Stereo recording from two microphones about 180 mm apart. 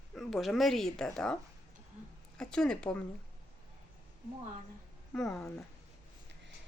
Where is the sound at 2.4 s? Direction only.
5° left (ahead or behind).